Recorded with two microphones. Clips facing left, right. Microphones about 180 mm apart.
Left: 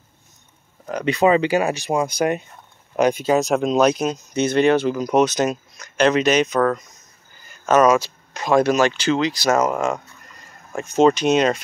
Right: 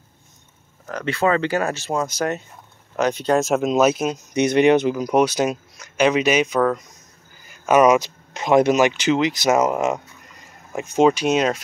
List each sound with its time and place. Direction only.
0.8 s speech: 15° left (ahead or behind); by 4.2 s 5° right (ahead or behind)
4.3 s speech: 15° right (ahead or behind)